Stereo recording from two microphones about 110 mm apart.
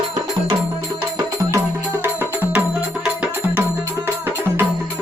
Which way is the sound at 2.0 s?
20° right (ahead or behind).